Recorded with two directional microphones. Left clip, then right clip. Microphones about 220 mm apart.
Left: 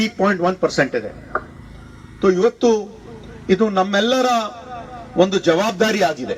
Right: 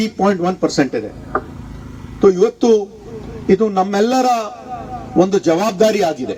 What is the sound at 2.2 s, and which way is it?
Speech, 55° right (ahead or behind).